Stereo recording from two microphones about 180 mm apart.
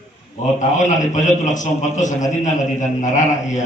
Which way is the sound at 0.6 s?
45° left (ahead or behind).